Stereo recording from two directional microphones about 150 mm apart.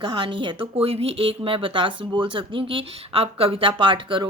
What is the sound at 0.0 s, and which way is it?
Speech, 35° right (ahead or behind).